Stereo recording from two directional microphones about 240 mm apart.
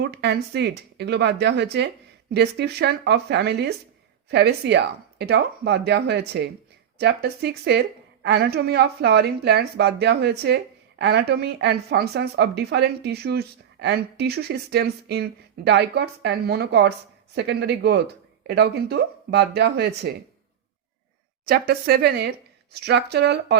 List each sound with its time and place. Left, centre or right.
0.0 s a woman's voice: right
21.4 s a woman's voice: right